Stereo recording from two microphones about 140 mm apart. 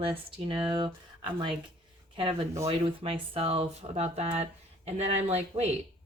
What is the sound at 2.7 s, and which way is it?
Speech, 40° right (ahead or behind).